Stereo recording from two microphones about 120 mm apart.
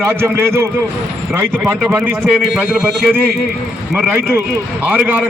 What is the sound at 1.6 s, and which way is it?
A man's voice, 10° right (ahead or behind).